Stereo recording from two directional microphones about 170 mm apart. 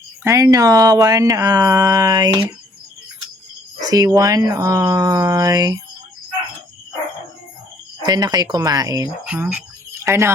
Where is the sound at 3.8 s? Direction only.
20° right (ahead or behind).